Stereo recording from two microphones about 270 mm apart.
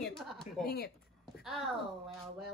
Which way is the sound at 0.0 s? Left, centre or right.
Centre.